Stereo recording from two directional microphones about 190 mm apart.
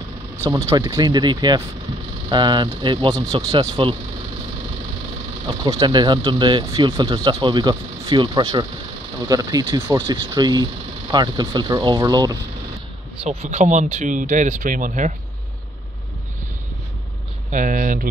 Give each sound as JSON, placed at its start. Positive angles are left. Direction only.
{"t": 0.4, "sound": "speech", "side_deg": -15}
{"t": 5.5, "sound": "speech", "side_deg": -20}
{"t": 13.2, "sound": "speech", "side_deg": -35}
{"t": 17.5, "sound": "speech", "side_deg": -45}